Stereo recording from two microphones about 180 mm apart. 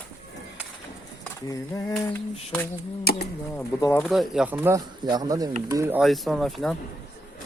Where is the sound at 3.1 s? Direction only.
60° left (ahead or behind).